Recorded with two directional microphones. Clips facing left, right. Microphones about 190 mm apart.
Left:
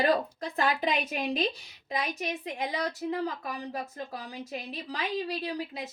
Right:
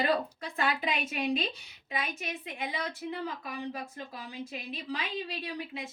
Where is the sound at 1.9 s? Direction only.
40° left (ahead or behind).